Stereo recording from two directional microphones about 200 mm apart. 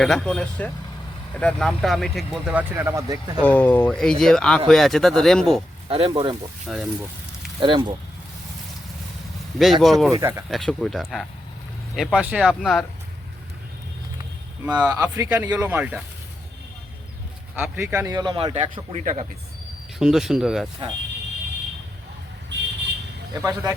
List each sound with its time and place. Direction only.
0.0 s speech: 5° left (ahead or behind); by 3.4 s 20° right (ahead or behind)
3.4 s speech: 10° left (ahead or behind)
5.9 s speech: 25° right (ahead or behind)
6.7 s speech: centre (ahead or behind)
7.6 s speech: 25° right (ahead or behind)
9.8 s speech: centre (ahead or behind)
10.1 s speech: 15° right (ahead or behind)
10.5 s speech: centre (ahead or behind)
14.7 s speech: 10° right (ahead or behind)
17.5 s speech: 10° right (ahead or behind); by 19.2 s 30° right (ahead or behind)
20.0 s speech: 5° right (ahead or behind)
22.5 s vehicle: 60° right (ahead or behind)
23.4 s speech: 15° right (ahead or behind)